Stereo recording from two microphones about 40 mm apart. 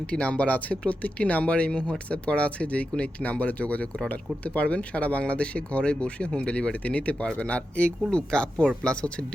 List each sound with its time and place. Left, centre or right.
0.1 s speech: left